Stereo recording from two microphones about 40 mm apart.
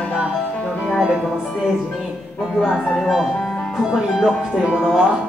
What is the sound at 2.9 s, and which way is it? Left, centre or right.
Speech, centre.